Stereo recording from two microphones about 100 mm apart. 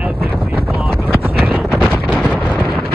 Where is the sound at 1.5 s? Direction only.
5° left (ahead or behind).